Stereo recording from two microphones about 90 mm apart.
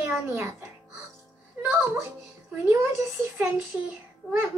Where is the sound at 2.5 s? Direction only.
25° right (ahead or behind).